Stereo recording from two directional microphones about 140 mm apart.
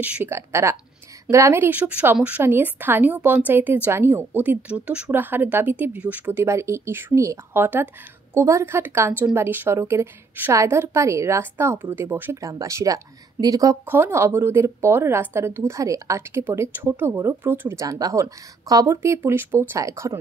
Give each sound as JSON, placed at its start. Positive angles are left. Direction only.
{"t": 0.0, "sound": "a woman's voice", "side_deg": -15}
{"t": 13.8, "sound": "speech", "side_deg": -15}